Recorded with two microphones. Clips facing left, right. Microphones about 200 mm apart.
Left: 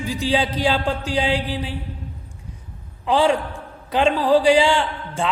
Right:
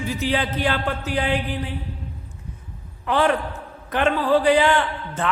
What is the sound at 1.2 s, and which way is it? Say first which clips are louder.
Mantra: left 1 dB; 90° left.